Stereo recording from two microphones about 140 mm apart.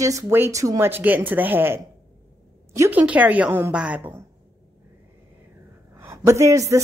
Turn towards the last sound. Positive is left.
turn(degrees=-20)  # may be behind; listen again after turning